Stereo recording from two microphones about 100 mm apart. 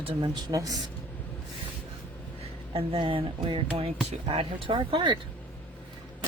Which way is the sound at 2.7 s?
65° right (ahead or behind).